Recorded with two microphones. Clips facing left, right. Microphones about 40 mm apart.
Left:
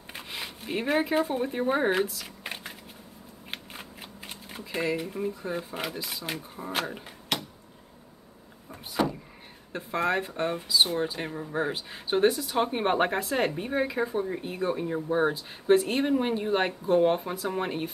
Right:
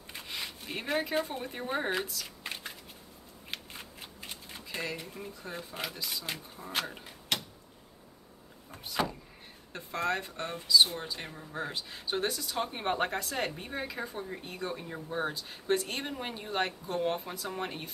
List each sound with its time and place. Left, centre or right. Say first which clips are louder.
0.3 s speech: left 5 dB; centre
3.5 s shuffling cards: left 2 dB; left
4.5 s typing: left 7 dB; centre
4.9 s speech: left 11 dB; centre
9.7 s speech: left 5 dB; left